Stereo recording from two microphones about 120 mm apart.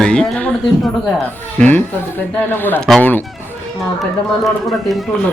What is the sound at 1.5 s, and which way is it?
Speech, 15° left (ahead or behind).